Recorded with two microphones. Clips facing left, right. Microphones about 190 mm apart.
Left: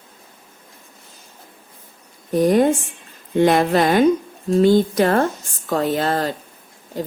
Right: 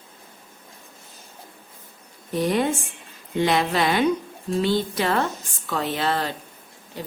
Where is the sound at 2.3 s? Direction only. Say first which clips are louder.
Left 7 dB; 45° left (ahead or behind).